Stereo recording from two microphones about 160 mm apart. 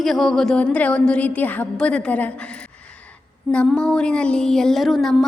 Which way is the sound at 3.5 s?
5° left (ahead or behind).